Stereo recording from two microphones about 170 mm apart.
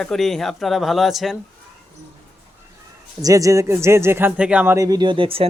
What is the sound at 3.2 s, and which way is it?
Speech, 20° right (ahead or behind).